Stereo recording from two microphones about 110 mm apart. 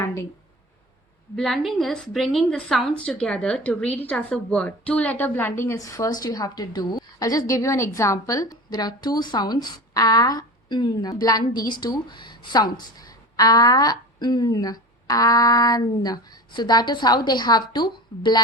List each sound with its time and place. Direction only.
1.4 s a woman's voice: centre (ahead or behind); by 18.4 s 40° left (ahead or behind)